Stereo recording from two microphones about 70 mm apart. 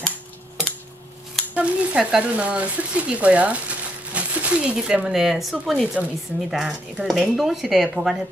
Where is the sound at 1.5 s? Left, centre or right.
Centre.